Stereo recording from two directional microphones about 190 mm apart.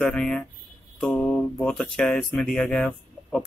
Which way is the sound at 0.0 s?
5° left (ahead or behind).